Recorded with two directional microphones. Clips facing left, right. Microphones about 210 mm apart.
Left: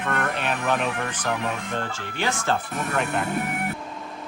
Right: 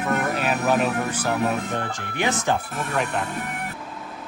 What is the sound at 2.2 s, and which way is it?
Speech, 15° right (ahead or behind).